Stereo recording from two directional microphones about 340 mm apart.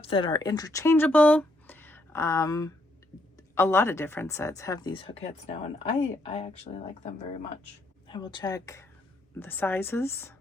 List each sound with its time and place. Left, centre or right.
0.0 s speech: centre